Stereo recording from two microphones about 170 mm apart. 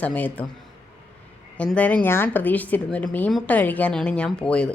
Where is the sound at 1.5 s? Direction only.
5° left (ahead or behind).